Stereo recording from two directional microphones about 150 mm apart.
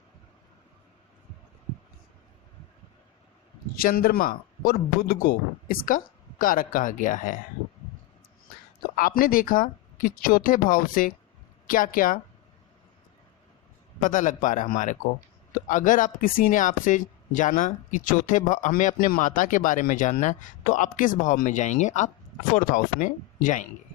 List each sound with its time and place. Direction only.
3.8 s speech: 80° left; by 7.3 s 60° left (ahead or behind)
9.0 s speech: 70° left (ahead or behind)
14.0 s speech: 60° left (ahead or behind)